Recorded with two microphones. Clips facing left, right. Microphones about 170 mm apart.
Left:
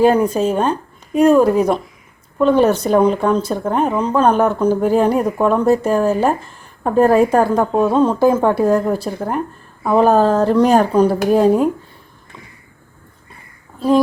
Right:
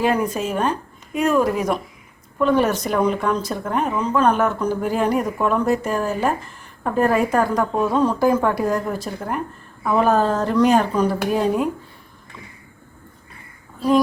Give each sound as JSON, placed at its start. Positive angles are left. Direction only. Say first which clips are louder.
{"t": 0.0, "sound": "speech", "louder": "left 7 dB", "side_deg": 30}